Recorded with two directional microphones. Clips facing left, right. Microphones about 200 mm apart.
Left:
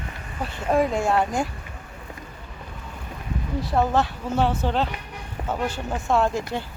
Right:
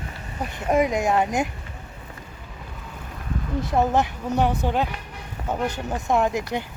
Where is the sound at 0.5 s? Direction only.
15° right (ahead or behind).